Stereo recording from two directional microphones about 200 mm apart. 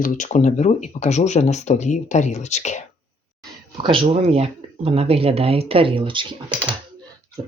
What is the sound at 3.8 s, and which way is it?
Speech, 25° right (ahead or behind).